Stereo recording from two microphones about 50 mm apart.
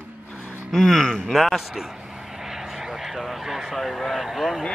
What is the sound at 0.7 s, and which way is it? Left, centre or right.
Speech, centre.